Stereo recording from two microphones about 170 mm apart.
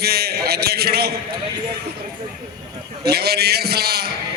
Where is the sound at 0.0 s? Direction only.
65° right (ahead or behind).